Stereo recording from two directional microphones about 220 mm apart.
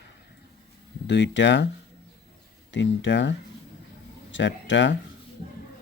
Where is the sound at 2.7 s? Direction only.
55° left (ahead or behind).